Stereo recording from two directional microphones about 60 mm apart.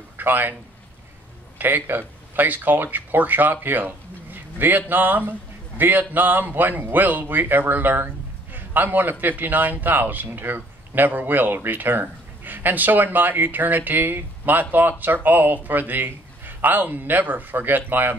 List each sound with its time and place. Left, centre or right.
0.2 s a man's voice: right
1.6 s a man's voice: right